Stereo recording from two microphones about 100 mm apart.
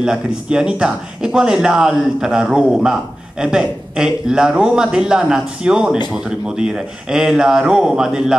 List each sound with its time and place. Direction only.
0.0 s speech: 5° right (ahead or behind)